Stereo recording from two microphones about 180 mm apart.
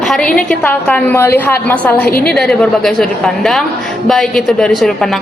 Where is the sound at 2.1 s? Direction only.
55° left (ahead or behind).